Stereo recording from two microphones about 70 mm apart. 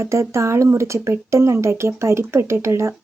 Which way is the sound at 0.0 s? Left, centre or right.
Right.